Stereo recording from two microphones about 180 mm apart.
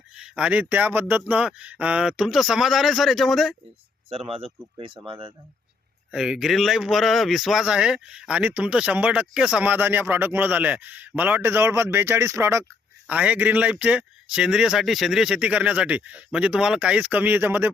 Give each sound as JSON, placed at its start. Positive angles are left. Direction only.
{"t": 0.1, "sound": "speech", "side_deg": -5}
{"t": 4.1, "sound": "speech", "side_deg": -30}
{"t": 6.1, "sound": "speech", "side_deg": -5}